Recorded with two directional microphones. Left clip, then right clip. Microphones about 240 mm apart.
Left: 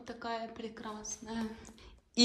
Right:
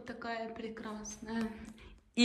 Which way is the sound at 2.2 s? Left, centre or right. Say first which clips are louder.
Left 2 dB; centre.